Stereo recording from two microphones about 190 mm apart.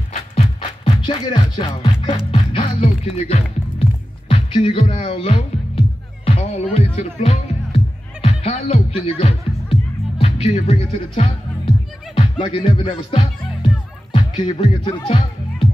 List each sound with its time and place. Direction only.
0.1 s music: 30° left (ahead or behind)
4.3 s speech: 30° left (ahead or behind)
6.2 s music: 30° left (ahead or behind)